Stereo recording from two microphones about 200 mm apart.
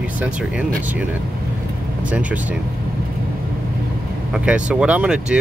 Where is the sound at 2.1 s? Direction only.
5° right (ahead or behind).